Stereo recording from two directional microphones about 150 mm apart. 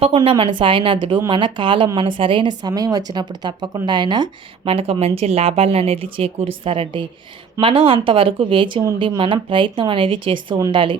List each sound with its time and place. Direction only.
0.3 s speech: 40° right (ahead or behind)